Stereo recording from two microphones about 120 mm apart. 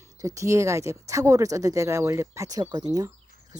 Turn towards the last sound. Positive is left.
turn(degrees=-30)  # may be behind; listen again after turning